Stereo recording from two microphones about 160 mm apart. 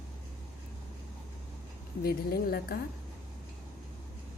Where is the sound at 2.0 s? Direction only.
75° left (ahead or behind).